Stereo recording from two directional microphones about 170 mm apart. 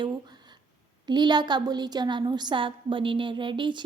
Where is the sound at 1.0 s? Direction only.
25° right (ahead or behind).